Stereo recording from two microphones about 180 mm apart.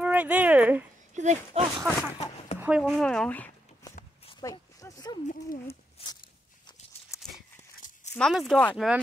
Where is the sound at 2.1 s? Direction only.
35° left (ahead or behind).